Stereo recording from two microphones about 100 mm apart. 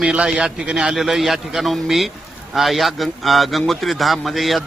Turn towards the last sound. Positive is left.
turn(degrees=0)  # may be behind; listen again after turning